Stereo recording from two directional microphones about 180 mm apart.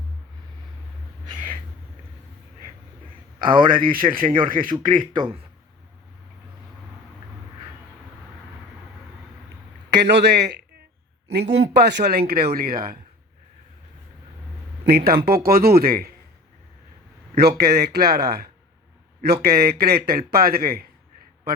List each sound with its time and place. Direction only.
3.3 s a man's voice: 25° right (ahead or behind)
3.9 s speech: 50° right (ahead or behind)
5.1 s speech: 25° right (ahead or behind)
9.9 s a man's voice: 70° right (ahead or behind)
12.3 s a man's voice: 60° right (ahead or behind)
14.8 s a man's voice: 60° right (ahead or behind)
17.3 s a man's voice: 65° right (ahead or behind)